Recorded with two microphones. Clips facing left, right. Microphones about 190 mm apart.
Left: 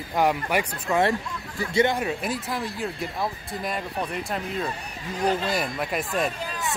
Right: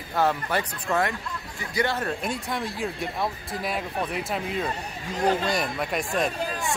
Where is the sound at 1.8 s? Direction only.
10° left (ahead or behind).